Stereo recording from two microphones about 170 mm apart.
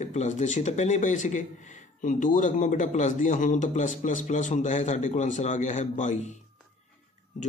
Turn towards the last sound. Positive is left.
turn(degrees=45)  # may be behind; listen again after turning